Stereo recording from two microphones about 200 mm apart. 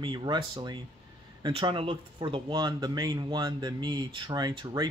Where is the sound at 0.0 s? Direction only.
25° right (ahead or behind).